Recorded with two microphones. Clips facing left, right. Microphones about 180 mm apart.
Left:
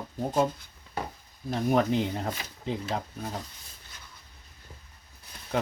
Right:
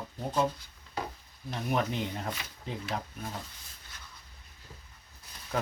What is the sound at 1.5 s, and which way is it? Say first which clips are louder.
Speech: left 7 dB; 40° left (ahead or behind).